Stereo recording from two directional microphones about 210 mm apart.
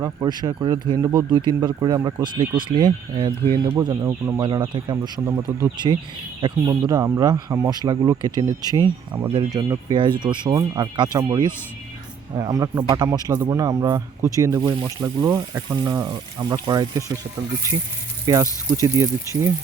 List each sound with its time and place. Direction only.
0.0 s speech: 20° right (ahead or behind)
18.3 s speech: 20° right (ahead or behind)